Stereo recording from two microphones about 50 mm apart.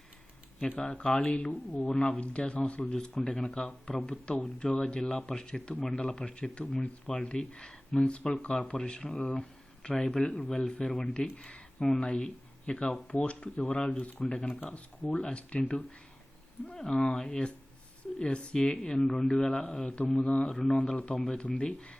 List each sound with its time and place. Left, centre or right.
0.9 s speech: left
2.8 s speech: centre
16.7 s speech: centre
20.9 s speech: left